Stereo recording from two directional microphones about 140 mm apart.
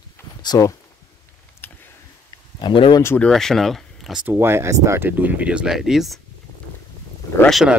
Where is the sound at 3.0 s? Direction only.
15° left (ahead or behind).